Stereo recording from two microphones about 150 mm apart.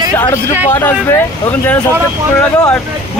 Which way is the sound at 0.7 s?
15° left (ahead or behind).